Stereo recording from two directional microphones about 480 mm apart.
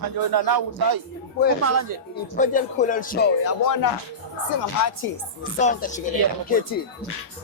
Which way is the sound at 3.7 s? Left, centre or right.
Left.